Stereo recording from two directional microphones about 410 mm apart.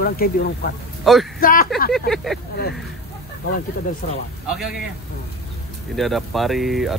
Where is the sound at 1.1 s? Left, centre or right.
Centre.